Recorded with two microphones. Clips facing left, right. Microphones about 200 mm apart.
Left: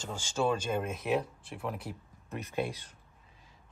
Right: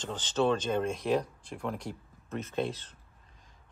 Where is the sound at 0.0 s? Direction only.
10° left (ahead or behind).